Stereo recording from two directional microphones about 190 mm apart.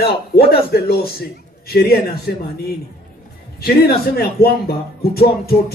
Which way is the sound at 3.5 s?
55° left (ahead or behind).